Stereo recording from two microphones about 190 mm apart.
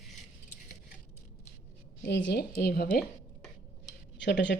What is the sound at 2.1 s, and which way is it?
Speech, 65° left (ahead or behind).